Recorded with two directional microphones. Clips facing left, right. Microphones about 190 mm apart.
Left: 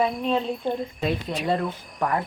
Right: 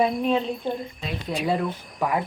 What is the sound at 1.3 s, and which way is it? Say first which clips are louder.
Speech: even; centre (ahead or behind).